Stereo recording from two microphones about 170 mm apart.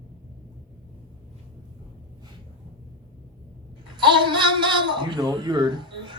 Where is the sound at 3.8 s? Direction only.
30° right (ahead or behind).